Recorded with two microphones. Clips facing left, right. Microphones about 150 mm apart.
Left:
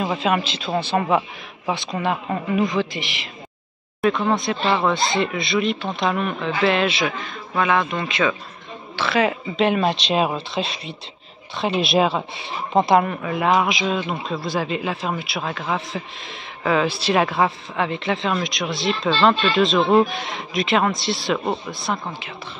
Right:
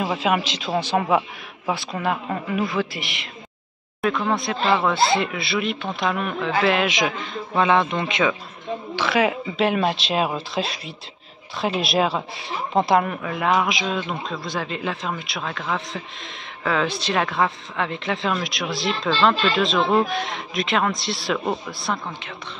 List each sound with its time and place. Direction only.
0.0 s a man's voice: 10° right (ahead or behind)
4.3 s a woman's voice: centre (ahead or behind)
7.5 s a woman's voice: 30° right (ahead or behind); by 22.0 s centre (ahead or behind)